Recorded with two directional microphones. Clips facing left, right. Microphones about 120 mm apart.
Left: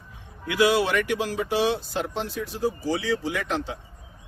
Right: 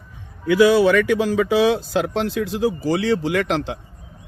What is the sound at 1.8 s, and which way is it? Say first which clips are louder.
Speech: right 8 dB; 90° right.